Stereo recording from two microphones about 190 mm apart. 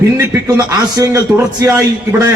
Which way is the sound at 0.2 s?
15° right (ahead or behind).